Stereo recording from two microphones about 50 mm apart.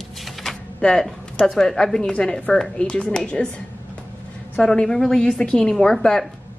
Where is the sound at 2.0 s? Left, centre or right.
Left.